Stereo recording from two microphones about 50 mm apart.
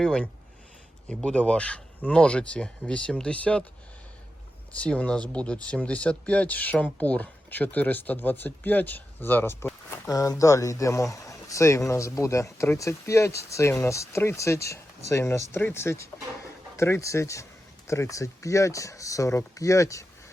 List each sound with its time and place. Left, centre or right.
0.0 s speech: centre
4.7 s speech: left
10.2 s speech: left
15.7 s speech: left
16.7 s speech: left
17.8 s speech: left